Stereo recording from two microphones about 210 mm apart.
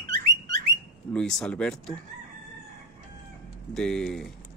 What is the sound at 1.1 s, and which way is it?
Speech, 5° left (ahead or behind).